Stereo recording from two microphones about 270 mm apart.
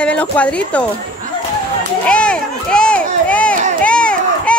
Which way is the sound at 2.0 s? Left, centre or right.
Centre.